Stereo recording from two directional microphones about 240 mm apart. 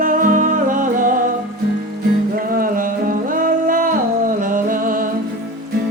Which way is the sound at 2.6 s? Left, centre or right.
Right.